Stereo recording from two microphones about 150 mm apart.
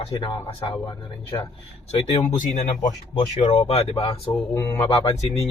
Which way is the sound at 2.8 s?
30° left (ahead or behind).